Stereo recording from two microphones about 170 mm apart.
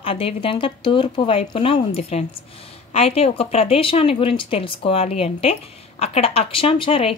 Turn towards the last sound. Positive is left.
turn(degrees=30)  # may be behind; listen again after turning